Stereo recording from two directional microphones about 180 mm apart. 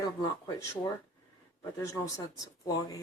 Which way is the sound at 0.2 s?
15° left (ahead or behind).